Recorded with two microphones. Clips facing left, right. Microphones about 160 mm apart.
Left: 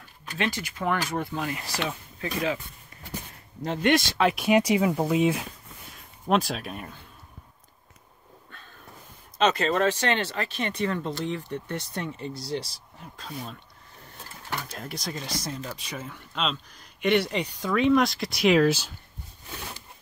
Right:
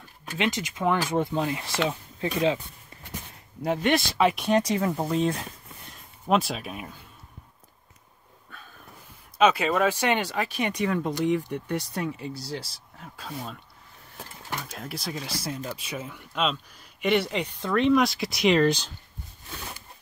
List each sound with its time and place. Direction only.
0.4 s speech: 20° right (ahead or behind)
3.6 s speech: 5° right (ahead or behind)
4.5 s speech: 10° left (ahead or behind)
9.4 s speech: 10° right (ahead or behind)
14.6 s speech: centre (ahead or behind)